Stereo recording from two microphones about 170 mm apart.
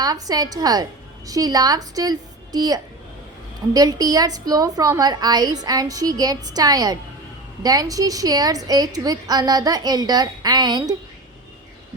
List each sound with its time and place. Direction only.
0.0 s a woman's voice: 20° right (ahead or behind)